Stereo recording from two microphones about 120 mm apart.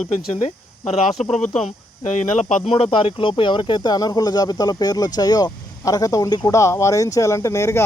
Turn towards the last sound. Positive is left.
turn(degrees=25)  # may be behind; listen again after turning